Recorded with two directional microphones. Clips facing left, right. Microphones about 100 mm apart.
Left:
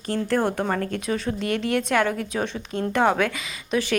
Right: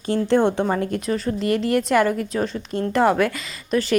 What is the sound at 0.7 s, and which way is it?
A woman's voice, 10° right (ahead or behind).